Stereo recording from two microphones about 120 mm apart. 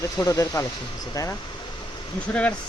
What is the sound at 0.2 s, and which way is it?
Speech, 25° left (ahead or behind).